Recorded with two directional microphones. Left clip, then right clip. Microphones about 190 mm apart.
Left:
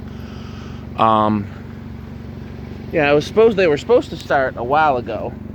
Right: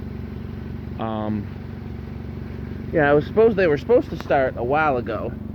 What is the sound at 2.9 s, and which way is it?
Speech, 10° left (ahead or behind).